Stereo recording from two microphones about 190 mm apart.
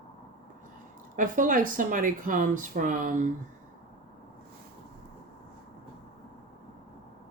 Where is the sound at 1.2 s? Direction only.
45° right (ahead or behind).